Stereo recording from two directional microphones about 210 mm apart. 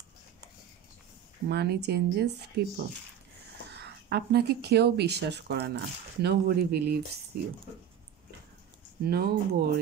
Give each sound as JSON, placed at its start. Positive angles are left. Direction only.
{"t": 1.5, "sound": "speech", "side_deg": -50}
{"t": 9.0, "sound": "speech", "side_deg": -50}